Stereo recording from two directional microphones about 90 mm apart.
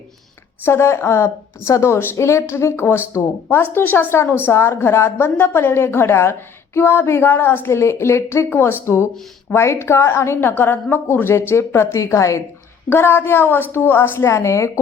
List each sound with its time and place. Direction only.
0.6 s a woman's voice: 30° left (ahead or behind)
12.9 s a woman's voice: 25° left (ahead or behind)